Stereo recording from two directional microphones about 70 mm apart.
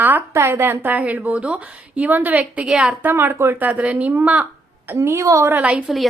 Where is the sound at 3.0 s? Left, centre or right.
Right.